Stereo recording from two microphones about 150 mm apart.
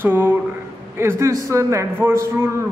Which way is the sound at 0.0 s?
15° right (ahead or behind).